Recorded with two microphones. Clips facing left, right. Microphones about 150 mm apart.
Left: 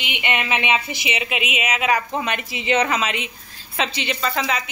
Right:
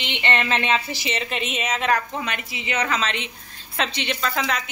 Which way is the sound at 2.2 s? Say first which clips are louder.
Left 4 dB; 20° left (ahead or behind).